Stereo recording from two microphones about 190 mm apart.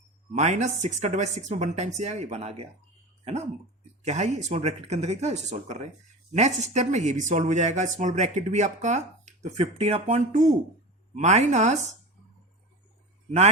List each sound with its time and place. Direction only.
0.3 s speech: 40° right (ahead or behind)
4.0 s speech: 35° right (ahead or behind)